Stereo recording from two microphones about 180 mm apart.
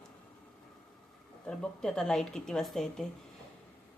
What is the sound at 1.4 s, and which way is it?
A woman's voice, 5° left (ahead or behind).